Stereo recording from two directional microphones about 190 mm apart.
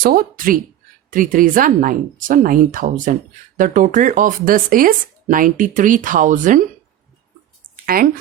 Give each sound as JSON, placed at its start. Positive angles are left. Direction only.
{"t": 0.0, "sound": "speech", "side_deg": -50}
{"t": 7.9, "sound": "speech", "side_deg": -50}